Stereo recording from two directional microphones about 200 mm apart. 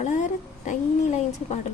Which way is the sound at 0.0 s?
35° left (ahead or behind).